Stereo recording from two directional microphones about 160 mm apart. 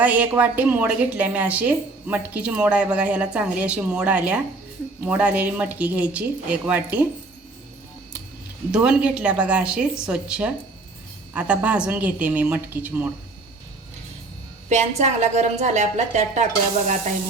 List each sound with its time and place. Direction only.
0.0 s a woman's voice: 10° right (ahead or behind)
8.7 s a woman's voice: 5° right (ahead or behind)
14.7 s a woman's voice: 45° right (ahead or behind)